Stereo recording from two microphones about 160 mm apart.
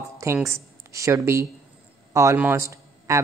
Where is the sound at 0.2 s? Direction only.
15° right (ahead or behind).